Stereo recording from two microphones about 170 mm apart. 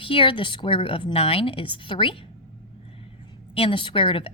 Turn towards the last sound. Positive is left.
turn(degrees=30)  # may be behind; listen again after turning